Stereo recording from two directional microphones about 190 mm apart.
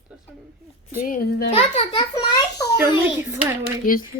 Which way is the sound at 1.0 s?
45° left (ahead or behind).